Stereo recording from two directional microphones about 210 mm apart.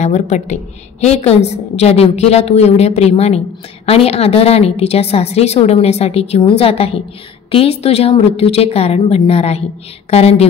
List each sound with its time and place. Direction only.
0.0 s a woman's voice: 35° left (ahead or behind)